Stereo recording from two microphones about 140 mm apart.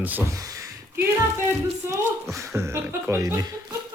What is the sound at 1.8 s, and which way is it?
Speech, 15° right (ahead or behind).